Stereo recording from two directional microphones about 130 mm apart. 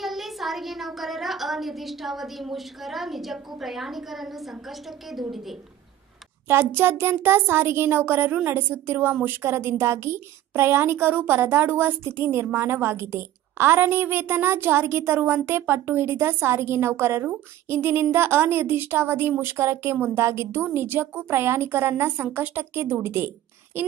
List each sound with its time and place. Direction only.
0.0 s a woman's voice: centre (ahead or behind)
6.4 s a child's voice: 20° right (ahead or behind)